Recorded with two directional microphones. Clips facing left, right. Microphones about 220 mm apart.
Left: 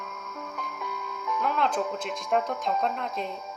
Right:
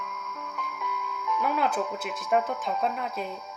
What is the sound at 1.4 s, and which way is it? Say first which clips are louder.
Speech: even; 10° right (ahead or behind).